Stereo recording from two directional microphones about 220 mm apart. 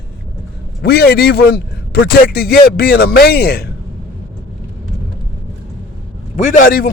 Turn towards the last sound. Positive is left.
turn(degrees=40)  # may be behind; listen again after turning